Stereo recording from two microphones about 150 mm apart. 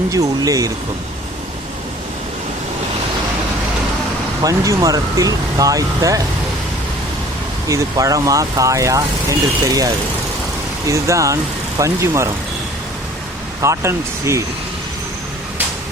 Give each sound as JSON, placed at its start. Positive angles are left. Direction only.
{"t": 0.1, "sound": "speech", "side_deg": -20}
{"t": 4.4, "sound": "speech", "side_deg": -20}
{"t": 7.7, "sound": "speech", "side_deg": -20}
{"t": 13.6, "sound": "speech", "side_deg": -20}